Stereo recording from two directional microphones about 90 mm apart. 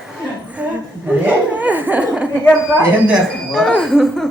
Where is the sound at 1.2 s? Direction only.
15° right (ahead or behind).